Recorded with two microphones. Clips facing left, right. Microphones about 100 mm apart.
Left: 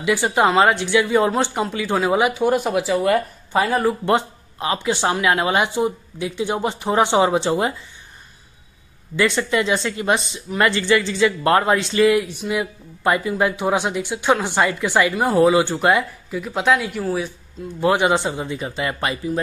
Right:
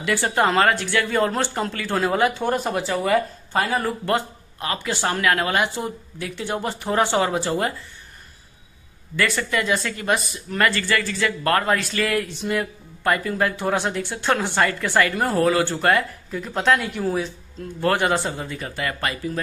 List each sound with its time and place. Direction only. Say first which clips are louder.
0.0 s speech: left 3 dB; 15° left (ahead or behind)
9.1 s speech: left 4 dB; 20° left (ahead or behind)
16.3 s speech: left 2 dB; 5° left (ahead or behind)
17.7 s speech: left 3 dB; 15° left (ahead or behind)